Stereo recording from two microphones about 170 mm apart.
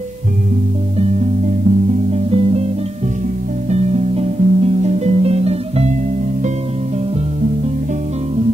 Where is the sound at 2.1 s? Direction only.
35° right (ahead or behind).